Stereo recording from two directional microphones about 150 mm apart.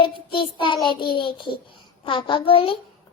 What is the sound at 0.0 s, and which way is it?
Child singing, 35° left (ahead or behind).